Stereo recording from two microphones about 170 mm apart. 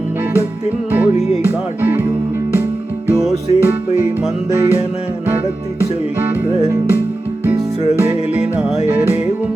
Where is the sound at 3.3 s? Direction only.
40° left (ahead or behind).